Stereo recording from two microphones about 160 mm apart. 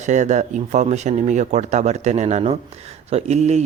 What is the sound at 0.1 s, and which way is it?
Speech, 50° right (ahead or behind).